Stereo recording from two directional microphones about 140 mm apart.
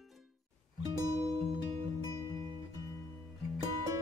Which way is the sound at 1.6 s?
30° right (ahead or behind).